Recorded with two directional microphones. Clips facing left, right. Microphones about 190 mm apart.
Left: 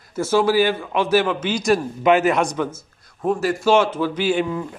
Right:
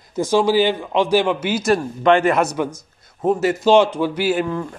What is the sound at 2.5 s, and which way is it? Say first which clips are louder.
A man's voice: right 1 dB; 15° right (ahead or behind).